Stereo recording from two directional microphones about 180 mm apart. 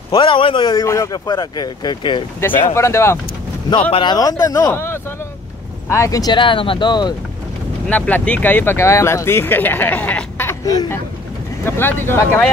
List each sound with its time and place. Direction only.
0.1 s speech: 25° left (ahead or behind)
7.9 s speech: 10° left (ahead or behind)